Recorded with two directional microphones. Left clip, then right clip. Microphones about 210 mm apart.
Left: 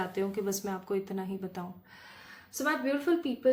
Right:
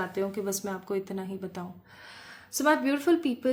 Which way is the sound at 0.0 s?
30° right (ahead or behind).